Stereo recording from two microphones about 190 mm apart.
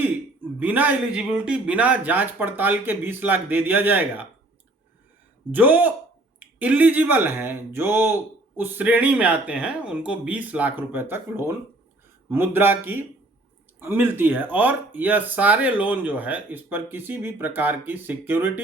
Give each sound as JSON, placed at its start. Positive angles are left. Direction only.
{"t": 0.6, "sound": "speech", "side_deg": -10}
{"t": 5.5, "sound": "speech", "side_deg": -10}